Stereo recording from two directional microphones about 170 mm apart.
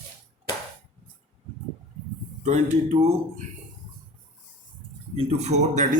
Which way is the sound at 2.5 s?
40° right (ahead or behind).